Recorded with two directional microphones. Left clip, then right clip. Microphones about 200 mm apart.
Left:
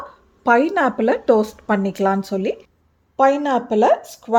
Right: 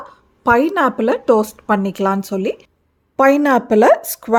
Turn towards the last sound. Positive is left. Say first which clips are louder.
# right 4 dB
turn(degrees=-35)  # may be behind; listen again after turning